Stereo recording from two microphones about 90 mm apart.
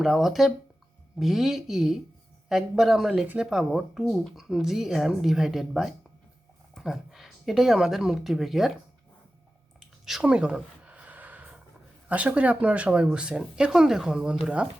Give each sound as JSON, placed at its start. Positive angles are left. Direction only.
{"t": 0.0, "sound": "speech", "side_deg": -5}
{"t": 10.1, "sound": "a sound", "side_deg": -10}
{"t": 12.0, "sound": "speech", "side_deg": -15}